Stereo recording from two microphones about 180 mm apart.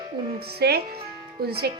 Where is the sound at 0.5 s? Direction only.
65° right (ahead or behind).